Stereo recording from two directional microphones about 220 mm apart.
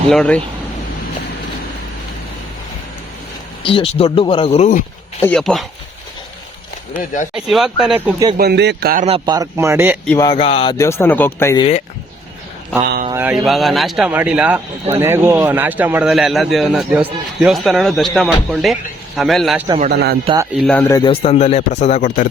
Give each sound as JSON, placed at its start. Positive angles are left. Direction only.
{"t": 0.1, "sound": "speech", "side_deg": 5}
{"t": 3.6, "sound": "a man's voice", "side_deg": 25}
{"t": 5.2, "sound": "speech", "side_deg": 5}
{"t": 7.3, "sound": "speech", "side_deg": 0}
{"t": 8.4, "sound": "speech", "side_deg": -50}
{"t": 9.0, "sound": "a man's voice", "side_deg": -20}
{"t": 10.1, "sound": "speech", "side_deg": 15}
{"t": 10.3, "sound": "a man's voice", "side_deg": 25}
{"t": 10.8, "sound": "speech", "side_deg": 10}
{"t": 13.1, "sound": "speech", "side_deg": -10}
{"t": 19.9, "sound": "speech", "side_deg": -45}
{"t": 20.2, "sound": "a man's voice", "side_deg": -15}
{"t": 20.5, "sound": "speech", "side_deg": 0}
{"t": 21.1, "sound": "a man's voice", "side_deg": 25}